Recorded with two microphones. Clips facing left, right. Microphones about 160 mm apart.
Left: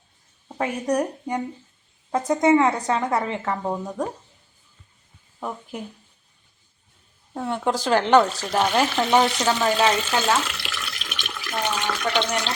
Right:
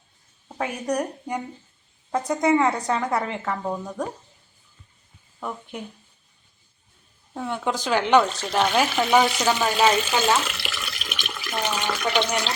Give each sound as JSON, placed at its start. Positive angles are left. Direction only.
{"t": 0.4, "sound": "a woman's voice", "side_deg": 0}
{"t": 2.3, "sound": "a woman's voice", "side_deg": 20}
{"t": 2.6, "sound": "a woman's voice", "side_deg": 0}
{"t": 5.4, "sound": "a woman's voice", "side_deg": 5}
{"t": 7.8, "sound": "speech", "side_deg": -5}